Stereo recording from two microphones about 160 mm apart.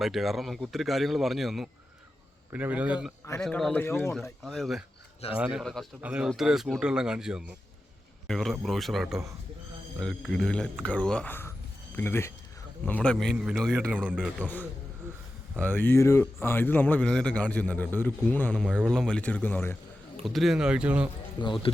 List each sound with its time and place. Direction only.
0.0 s speech: centre (ahead or behind)
3.4 s speech: 5° left (ahead or behind)
4.2 s speech: centre (ahead or behind)
15.5 s speech: 10° left (ahead or behind)
20.2 s speech: centre (ahead or behind)
21.4 s speech: 25° left (ahead or behind)